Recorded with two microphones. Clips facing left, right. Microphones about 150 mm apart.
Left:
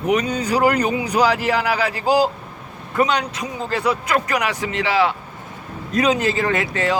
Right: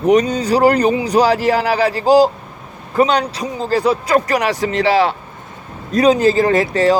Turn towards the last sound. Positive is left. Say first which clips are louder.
# right 7 dB
turn(degrees=-35)  # may be behind; listen again after turning